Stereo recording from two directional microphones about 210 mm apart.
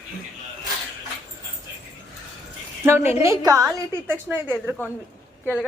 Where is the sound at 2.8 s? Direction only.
10° right (ahead or behind).